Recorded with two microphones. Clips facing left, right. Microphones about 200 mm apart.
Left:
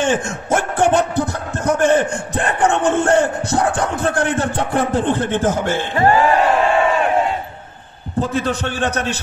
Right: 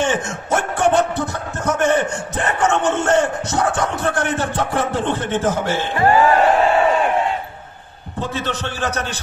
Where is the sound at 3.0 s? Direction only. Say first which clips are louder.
Left 2 dB; 30° left (ahead or behind).